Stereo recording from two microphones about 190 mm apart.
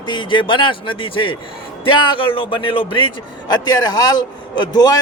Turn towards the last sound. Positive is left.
turn(degrees=20)  # may be behind; listen again after turning